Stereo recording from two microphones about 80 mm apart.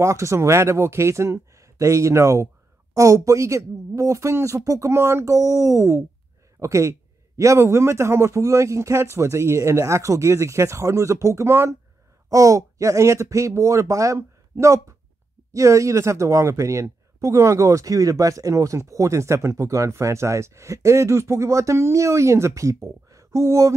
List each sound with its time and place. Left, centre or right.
0.0 s speech: right
2.9 s a sound: right
3.3 s speech: right
12.3 s speech: right